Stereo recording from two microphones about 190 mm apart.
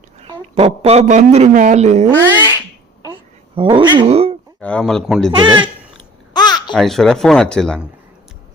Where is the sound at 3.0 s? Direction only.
25° right (ahead or behind).